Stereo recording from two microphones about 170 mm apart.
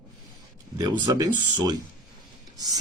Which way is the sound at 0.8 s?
25° right (ahead or behind).